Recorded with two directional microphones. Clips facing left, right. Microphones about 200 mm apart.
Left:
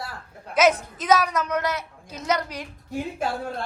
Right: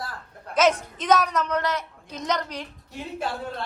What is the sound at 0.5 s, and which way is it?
A woman's voice, 10° left (ahead or behind).